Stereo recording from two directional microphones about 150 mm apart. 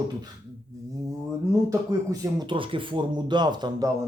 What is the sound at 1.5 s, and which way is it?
Speech, 25° right (ahead or behind).